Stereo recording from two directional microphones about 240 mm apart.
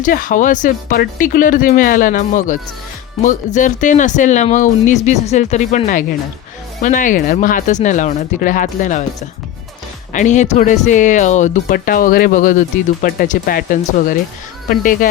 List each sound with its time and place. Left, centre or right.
0.0 s speech: left
10.1 s speech: left